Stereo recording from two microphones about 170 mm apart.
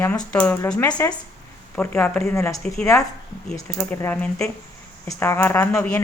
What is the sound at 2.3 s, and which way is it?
Speech, 15° left (ahead or behind).